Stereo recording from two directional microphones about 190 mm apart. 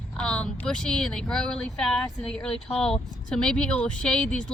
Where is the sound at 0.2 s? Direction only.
5° left (ahead or behind).